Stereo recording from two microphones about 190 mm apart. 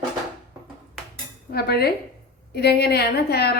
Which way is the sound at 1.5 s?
55° left (ahead or behind).